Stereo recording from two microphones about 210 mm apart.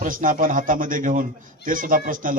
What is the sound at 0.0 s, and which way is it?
A man's voice, 40° right (ahead or behind).